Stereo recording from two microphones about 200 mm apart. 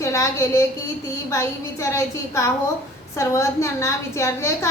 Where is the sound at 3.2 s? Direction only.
15° left (ahead or behind).